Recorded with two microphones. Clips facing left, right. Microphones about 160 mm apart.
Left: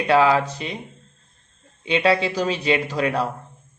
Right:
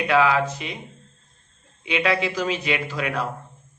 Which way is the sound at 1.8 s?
30° left (ahead or behind).